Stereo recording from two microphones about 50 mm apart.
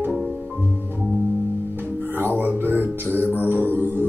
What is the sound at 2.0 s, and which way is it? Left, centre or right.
Music, right.